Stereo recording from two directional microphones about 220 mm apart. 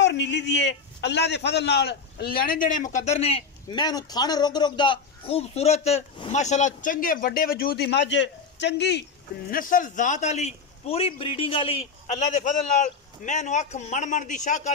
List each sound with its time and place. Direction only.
0.0 s a man's voice: 50° left (ahead or behind)
9.5 s a man's voice: 40° left (ahead or behind)